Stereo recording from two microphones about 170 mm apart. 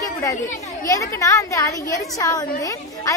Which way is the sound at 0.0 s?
20° left (ahead or behind).